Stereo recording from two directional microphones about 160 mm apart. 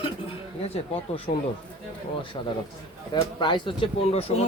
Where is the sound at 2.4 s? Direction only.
30° left (ahead or behind).